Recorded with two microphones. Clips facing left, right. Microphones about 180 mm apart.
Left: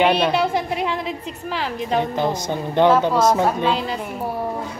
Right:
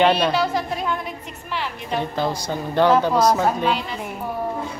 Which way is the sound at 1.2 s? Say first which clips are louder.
Left 3 dB; 35° left (ahead or behind).